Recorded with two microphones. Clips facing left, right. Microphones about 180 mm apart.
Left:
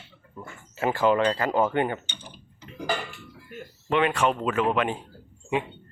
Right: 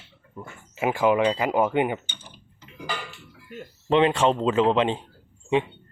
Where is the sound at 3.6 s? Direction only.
25° right (ahead or behind).